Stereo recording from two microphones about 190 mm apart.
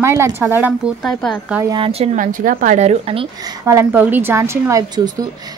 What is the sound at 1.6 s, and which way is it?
Speech, 25° right (ahead or behind).